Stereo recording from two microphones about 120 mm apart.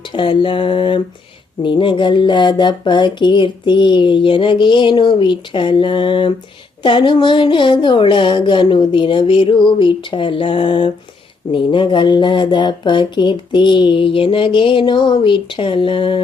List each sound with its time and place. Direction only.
0.1 s speech: 45° left (ahead or behind)